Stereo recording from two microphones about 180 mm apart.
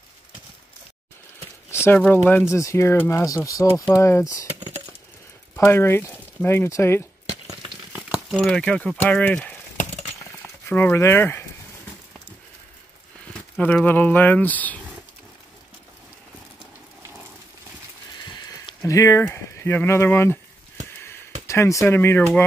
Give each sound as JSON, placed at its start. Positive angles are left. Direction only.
{"t": 1.7, "sound": "speech", "side_deg": 10}
{"t": 4.6, "sound": "a sound", "side_deg": -35}
{"t": 5.6, "sound": "speech", "side_deg": 15}
{"t": 7.4, "sound": "a sound", "side_deg": -20}
{"t": 8.1, "sound": "speech", "side_deg": 0}
{"t": 10.7, "sound": "speech", "side_deg": 10}
{"t": 13.6, "sound": "speech", "side_deg": 10}
{"t": 18.4, "sound": "speech", "side_deg": 20}
{"t": 21.5, "sound": "speech", "side_deg": 15}